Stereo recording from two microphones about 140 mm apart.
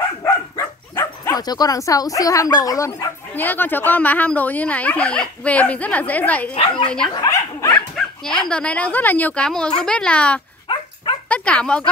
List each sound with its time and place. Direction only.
0.2 s bow-wow: 20° left (ahead or behind)
3.3 s speech: 15° left (ahead or behind)
7.2 s dog: 25° left (ahead or behind)
7.7 s dog: 5° left (ahead or behind)
8.5 s speech: 10° left (ahead or behind)